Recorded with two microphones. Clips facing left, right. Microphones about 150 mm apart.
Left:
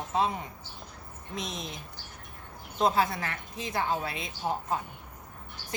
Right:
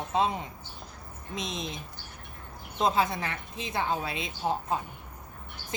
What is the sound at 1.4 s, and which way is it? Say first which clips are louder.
Speech: right 2 dB; 20° right (ahead or behind).